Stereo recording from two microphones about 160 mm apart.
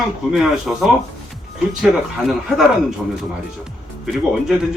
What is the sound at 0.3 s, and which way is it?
Speech, centre (ahead or behind).